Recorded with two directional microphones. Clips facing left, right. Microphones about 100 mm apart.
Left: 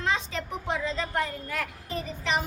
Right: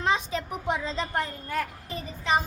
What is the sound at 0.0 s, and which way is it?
A woman's voice, 20° right (ahead or behind).